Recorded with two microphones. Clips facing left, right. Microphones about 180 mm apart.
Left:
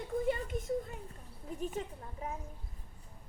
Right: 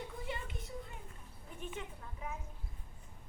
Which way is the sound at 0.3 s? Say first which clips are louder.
Left 11 dB; 45° left (ahead or behind).